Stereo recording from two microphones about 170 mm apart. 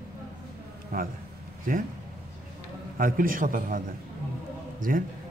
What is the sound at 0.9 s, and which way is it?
Speech, 55° right (ahead or behind).